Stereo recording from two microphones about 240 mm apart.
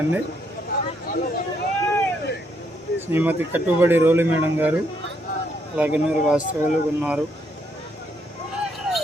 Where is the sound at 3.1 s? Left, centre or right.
Centre.